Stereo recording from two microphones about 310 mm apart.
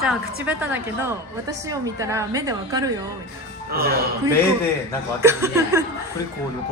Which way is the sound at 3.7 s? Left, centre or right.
Right.